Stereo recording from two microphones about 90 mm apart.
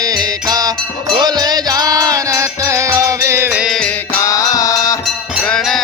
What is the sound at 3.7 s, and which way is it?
Music, 5° left (ahead or behind).